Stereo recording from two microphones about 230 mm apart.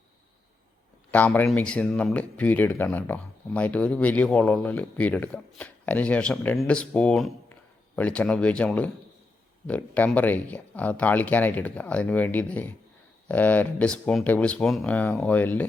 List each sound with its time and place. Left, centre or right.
1.1 s speech: centre